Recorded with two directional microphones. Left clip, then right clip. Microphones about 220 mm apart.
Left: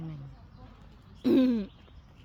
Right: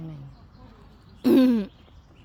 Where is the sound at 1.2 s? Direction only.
25° right (ahead or behind).